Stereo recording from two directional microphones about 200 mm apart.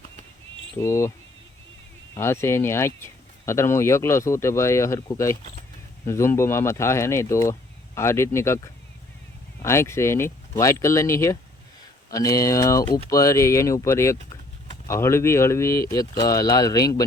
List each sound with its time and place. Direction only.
0.8 s speech: 15° left (ahead or behind)
2.1 s speech: 10° left (ahead or behind)